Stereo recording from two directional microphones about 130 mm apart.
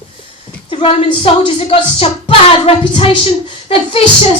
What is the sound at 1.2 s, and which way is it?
Music, 45° left (ahead or behind).